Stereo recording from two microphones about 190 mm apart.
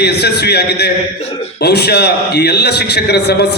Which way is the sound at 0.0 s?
60° left (ahead or behind).